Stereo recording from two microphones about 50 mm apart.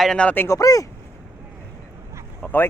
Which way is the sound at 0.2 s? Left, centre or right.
Left.